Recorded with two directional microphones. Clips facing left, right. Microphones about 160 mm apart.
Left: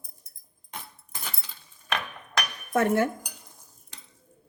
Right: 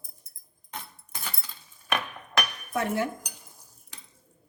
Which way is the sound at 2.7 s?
50° left (ahead or behind).